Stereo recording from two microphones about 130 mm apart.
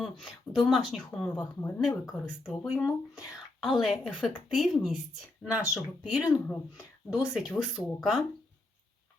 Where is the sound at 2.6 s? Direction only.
5° right (ahead or behind).